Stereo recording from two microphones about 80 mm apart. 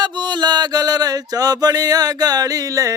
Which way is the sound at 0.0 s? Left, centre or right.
Right.